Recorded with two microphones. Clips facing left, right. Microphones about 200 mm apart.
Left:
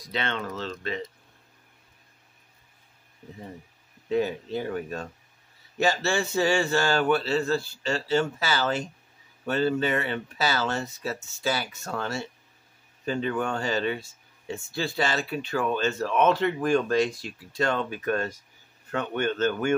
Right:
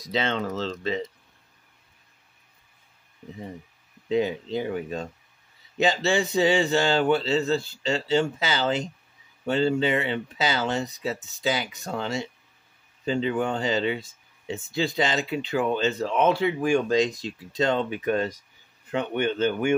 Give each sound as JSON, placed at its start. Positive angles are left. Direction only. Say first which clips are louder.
{"t": 0.5, "sound": "speech", "louder": "right 4 dB", "side_deg": -30}
{"t": 4.1, "sound": "speech", "louder": "right 2 dB", "side_deg": -20}